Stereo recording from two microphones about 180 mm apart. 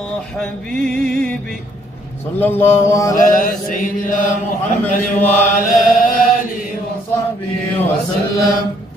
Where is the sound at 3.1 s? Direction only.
50° left (ahead or behind).